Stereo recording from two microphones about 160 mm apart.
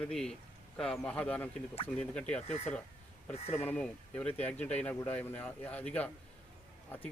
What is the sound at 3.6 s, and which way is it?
Speech, 10° left (ahead or behind).